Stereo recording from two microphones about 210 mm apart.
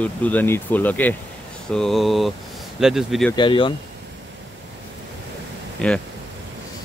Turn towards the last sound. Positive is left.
turn(degrees=5)  # may be behind; listen again after turning